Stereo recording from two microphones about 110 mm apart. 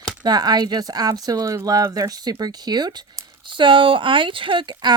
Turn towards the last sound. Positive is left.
turn(degrees=-45)  # may be behind; listen again after turning